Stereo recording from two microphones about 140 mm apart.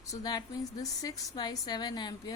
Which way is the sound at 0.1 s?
30° left (ahead or behind).